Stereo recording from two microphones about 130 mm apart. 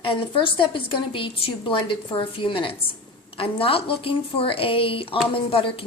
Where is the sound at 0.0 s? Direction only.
40° left (ahead or behind).